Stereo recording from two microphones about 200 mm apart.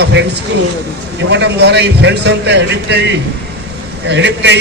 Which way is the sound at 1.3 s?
60° right (ahead or behind).